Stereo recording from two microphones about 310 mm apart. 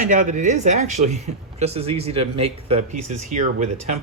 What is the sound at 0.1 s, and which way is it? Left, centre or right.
Speech, right.